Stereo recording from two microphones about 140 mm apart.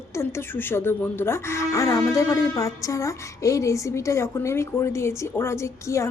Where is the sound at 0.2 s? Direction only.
15° left (ahead or behind).